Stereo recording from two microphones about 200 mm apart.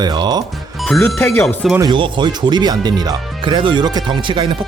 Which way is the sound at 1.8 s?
25° right (ahead or behind).